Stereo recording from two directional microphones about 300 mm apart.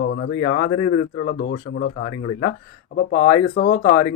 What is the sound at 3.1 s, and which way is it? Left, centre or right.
Speech, left.